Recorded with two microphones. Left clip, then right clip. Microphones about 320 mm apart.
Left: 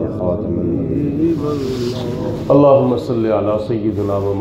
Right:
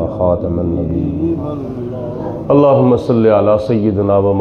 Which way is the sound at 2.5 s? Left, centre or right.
Right.